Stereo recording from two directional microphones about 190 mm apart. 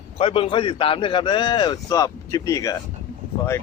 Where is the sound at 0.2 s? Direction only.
30° left (ahead or behind).